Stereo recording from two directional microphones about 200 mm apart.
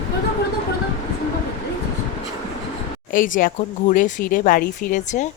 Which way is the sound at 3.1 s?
40° left (ahead or behind).